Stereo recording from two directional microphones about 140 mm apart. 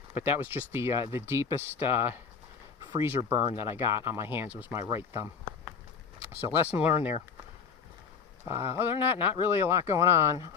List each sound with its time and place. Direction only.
0.1 s speech: 15° right (ahead or behind)
8.4 s speech: 20° right (ahead or behind)